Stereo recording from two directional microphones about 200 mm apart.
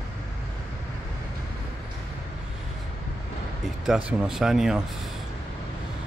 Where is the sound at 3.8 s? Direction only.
5° right (ahead or behind).